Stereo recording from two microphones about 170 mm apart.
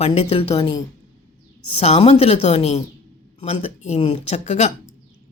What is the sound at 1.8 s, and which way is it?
Speech, 35° left (ahead or behind).